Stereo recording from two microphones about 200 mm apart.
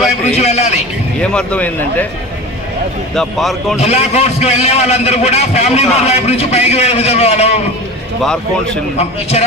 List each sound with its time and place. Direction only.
0.3 s a man's voice: 30° left (ahead or behind)
1.2 s speech: 5° left (ahead or behind)
3.2 s speech: centre (ahead or behind)
3.8 s a man's voice: 30° left (ahead or behind)
8.2 s speech: 5° left (ahead or behind)